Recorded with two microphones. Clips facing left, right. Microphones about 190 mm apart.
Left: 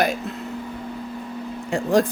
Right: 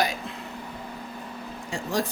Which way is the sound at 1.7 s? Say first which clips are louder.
Left 9 dB; 55° left (ahead or behind).